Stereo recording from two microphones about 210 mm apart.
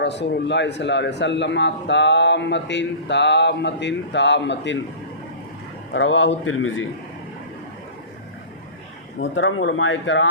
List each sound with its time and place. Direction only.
0.0 s a man's voice: 55° left (ahead or behind)
5.9 s a man's voice: 65° left (ahead or behind)
9.2 s a man's voice: 65° left (ahead or behind)